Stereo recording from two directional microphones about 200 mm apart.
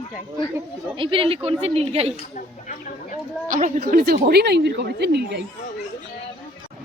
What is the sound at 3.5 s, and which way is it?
Speech, 40° right (ahead or behind).